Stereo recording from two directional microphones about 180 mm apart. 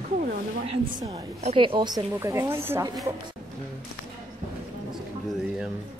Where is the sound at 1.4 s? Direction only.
30° right (ahead or behind); by 2.9 s 15° right (ahead or behind).